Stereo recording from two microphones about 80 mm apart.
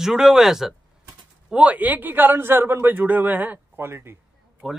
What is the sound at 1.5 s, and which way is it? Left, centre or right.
A man's voice, centre.